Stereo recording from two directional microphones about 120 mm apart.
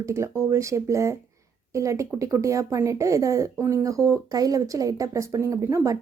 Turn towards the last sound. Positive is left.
turn(degrees=-25)  # may be behind; listen again after turning